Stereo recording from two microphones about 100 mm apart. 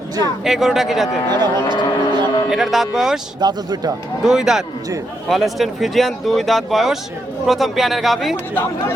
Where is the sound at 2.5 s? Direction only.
5° right (ahead or behind).